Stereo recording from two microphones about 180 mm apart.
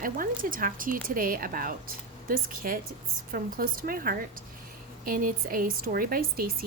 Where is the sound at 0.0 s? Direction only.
50° right (ahead or behind).